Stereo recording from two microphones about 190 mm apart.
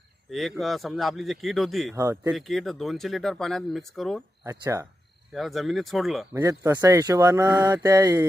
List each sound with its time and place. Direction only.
0.3 s speech: centre (ahead or behind)
2.0 s speech: 15° right (ahead or behind)
2.3 s speech: centre (ahead or behind)
4.4 s speech: 20° right (ahead or behind)
5.3 s speech: centre (ahead or behind)
6.3 s speech: 15° right (ahead or behind)